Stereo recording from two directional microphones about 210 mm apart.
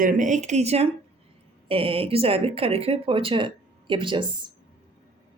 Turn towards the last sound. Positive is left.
turn(degrees=-25)  # may be behind; listen again after turning